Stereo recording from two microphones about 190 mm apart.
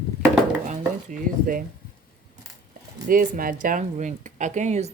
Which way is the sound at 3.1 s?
50° right (ahead or behind).